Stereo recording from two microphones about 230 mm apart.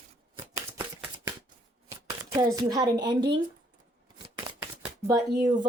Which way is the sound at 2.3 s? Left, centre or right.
Centre.